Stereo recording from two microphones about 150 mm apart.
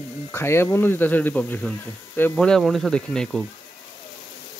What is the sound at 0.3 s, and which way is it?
Speech, 15° left (ahead or behind).